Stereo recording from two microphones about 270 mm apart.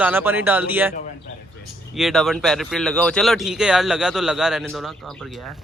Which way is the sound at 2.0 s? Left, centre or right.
Centre.